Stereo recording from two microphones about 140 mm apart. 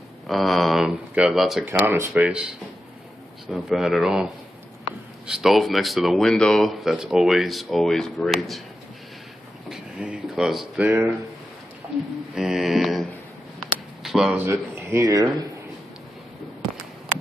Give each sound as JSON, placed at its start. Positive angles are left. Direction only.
{"t": 0.3, "sound": "speech", "side_deg": 0}
{"t": 1.7, "sound": "speech", "side_deg": -15}
{"t": 3.6, "sound": "speech", "side_deg": 0}
{"t": 9.7, "sound": "a sound", "side_deg": -5}
{"t": 10.9, "sound": "speech", "side_deg": -10}
{"t": 12.4, "sound": "speech", "side_deg": -5}
{"t": 13.6, "sound": "a sound", "side_deg": 0}
{"t": 14.3, "sound": "speech", "side_deg": -15}